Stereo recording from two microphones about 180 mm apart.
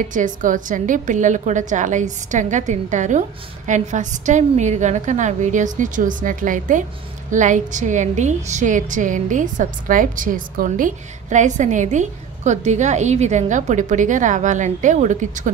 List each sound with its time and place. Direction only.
0.0 s a woman's voice: 45° right (ahead or behind)